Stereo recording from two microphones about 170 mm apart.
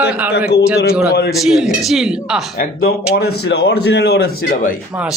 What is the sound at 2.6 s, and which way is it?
Speech, 60° left (ahead or behind).